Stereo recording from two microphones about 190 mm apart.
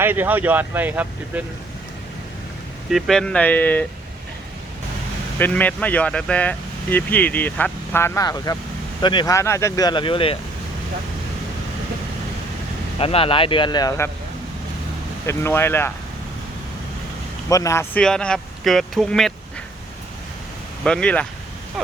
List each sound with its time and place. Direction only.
0.0 s speech: 10° right (ahead or behind)
2.9 s speech: centre (ahead or behind)
5.4 s speech: 10° left (ahead or behind); by 10.3 s 25° left (ahead or behind)
13.0 s speech: 30° left (ahead or behind)
15.3 s speech: 15° left (ahead or behind)
17.5 s speech: 15° left (ahead or behind)
20.8 s speech: 5° left (ahead or behind)